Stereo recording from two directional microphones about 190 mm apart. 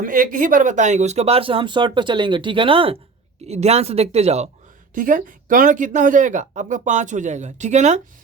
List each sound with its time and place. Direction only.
0.0 s speech: 45° right (ahead or behind)
4.9 s speech: 45° right (ahead or behind)